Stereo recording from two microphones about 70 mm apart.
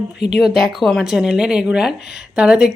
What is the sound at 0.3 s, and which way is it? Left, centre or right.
A woman's voice, centre.